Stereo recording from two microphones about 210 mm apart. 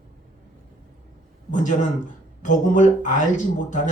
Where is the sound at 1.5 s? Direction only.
35° left (ahead or behind).